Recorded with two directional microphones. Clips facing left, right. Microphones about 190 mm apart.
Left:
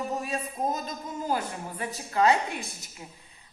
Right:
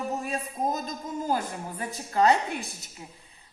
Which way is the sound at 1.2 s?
45° right (ahead or behind).